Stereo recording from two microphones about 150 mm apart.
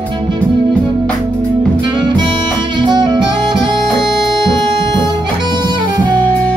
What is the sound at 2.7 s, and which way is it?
Saxophone, 30° right (ahead or behind).